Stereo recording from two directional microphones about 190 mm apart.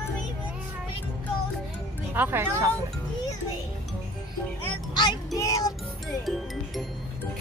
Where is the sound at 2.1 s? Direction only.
10° right (ahead or behind).